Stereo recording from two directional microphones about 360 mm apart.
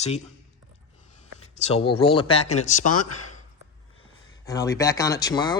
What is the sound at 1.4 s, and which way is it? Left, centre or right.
Speech, centre.